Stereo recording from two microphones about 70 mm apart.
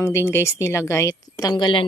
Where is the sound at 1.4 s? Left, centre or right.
Left.